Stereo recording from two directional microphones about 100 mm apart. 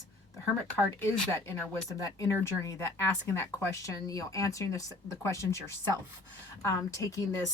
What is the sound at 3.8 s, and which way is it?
Speech, 35° left (ahead or behind).